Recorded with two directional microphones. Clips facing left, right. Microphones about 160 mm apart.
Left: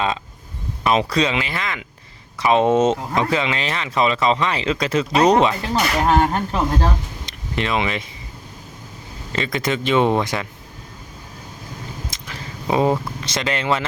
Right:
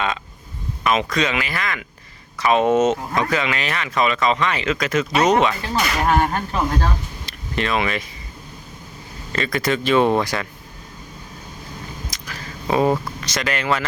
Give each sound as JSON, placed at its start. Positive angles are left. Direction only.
{"t": 0.9, "sound": "speech", "side_deg": 30}
{"t": 9.3, "sound": "speech", "side_deg": 20}
{"t": 12.1, "sound": "a sound", "side_deg": 25}
{"t": 12.6, "sound": "speech", "side_deg": 20}